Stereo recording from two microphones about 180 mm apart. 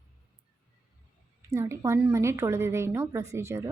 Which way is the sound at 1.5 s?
15° right (ahead or behind).